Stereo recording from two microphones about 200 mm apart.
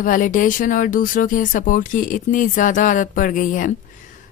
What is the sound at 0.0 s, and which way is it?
Speech, 40° left (ahead or behind).